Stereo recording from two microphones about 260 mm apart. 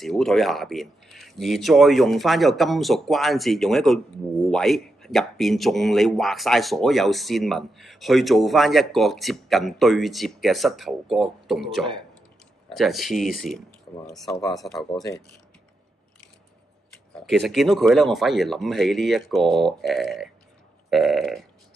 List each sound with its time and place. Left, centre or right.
0.0 s speech: centre
17.3 s speech: centre